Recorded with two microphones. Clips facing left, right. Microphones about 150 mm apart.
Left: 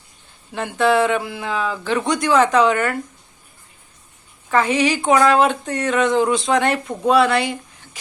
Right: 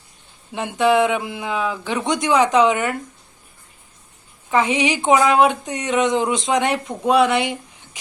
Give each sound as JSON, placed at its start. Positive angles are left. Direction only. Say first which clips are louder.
{"t": 0.5, "sound": "speech", "louder": "even", "side_deg": -15}
{"t": 4.5, "sound": "speech", "louder": "left 1 dB", "side_deg": -20}